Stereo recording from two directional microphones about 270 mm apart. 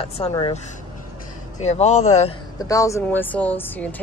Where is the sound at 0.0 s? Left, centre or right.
Left.